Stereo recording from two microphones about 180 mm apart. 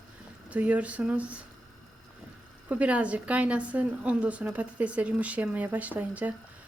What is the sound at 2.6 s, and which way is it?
A woman's voice, 5° right (ahead or behind).